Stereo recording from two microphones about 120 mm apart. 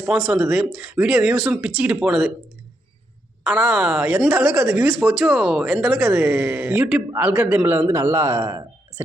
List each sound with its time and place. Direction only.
0.0 s speech: 5° right (ahead or behind)
3.4 s a man's voice: 10° right (ahead or behind)